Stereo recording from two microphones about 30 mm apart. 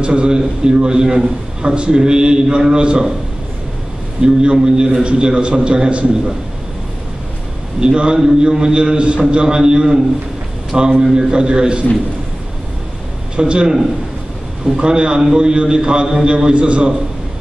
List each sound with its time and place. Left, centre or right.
0.0 s a man's voice: right
4.2 s a man's voice: right
7.8 s a man's voice: right
9.3 s a man's voice: right
13.4 s a man's voice: right
14.8 s a man's voice: right